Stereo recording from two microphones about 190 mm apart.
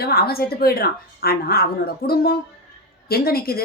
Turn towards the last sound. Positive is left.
turn(degrees=50)  # may be behind; listen again after turning